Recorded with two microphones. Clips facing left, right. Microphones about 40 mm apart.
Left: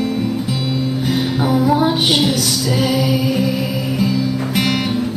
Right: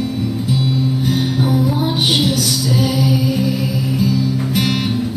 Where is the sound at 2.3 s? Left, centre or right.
Left; by 5.0 s centre.